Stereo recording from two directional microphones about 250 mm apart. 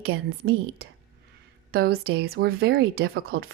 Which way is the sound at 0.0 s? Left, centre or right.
Right.